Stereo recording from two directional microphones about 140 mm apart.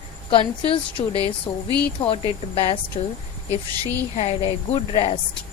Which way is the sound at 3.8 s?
45° left (ahead or behind).